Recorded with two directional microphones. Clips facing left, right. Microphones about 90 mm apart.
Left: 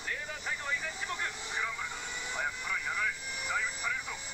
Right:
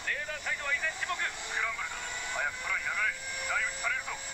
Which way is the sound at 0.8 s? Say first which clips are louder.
Right 3 dB; 40° right (ahead or behind).